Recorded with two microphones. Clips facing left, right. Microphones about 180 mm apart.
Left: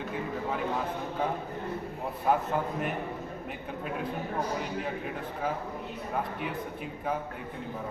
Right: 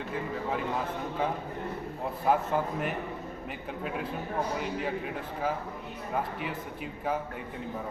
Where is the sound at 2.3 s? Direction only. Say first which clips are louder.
Even; centre (ahead or behind).